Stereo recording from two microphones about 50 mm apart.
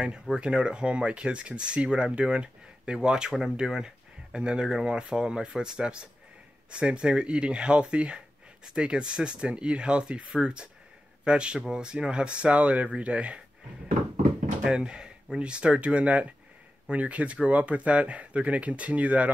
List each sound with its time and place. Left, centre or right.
0.0 s speech: centre
14.6 s speech: centre